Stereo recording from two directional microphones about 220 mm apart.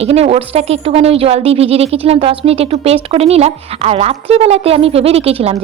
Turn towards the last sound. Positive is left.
turn(degrees=-25)  # may be behind; listen again after turning